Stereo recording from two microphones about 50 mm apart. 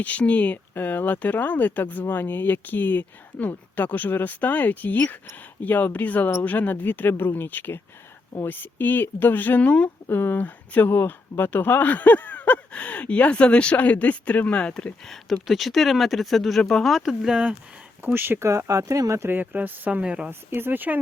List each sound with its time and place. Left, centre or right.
0.0 s speech: left
0.7 s speech: left
10.1 s speech: left
15.0 s speech: centre
17.0 s speech: centre
18.0 s speech: right
18.3 s speech: right
19.3 s speech: right
20.0 s speech: right
20.5 s speech: right